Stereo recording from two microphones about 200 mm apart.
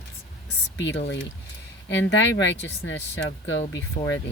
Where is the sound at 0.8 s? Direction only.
60° left (ahead or behind).